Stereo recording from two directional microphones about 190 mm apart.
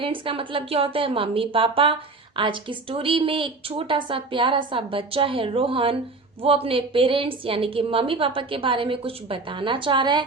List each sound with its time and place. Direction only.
0.0 s a woman's voice: 30° right (ahead or behind)